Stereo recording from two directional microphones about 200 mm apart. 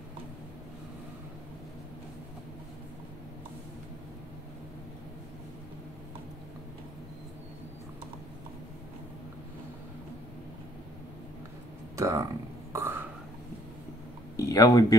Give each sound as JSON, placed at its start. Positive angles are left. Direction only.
{"t": 12.0, "sound": "speech", "side_deg": -15}
{"t": 12.7, "sound": "a sound", "side_deg": -10}
{"t": 14.3, "sound": "speech", "side_deg": 15}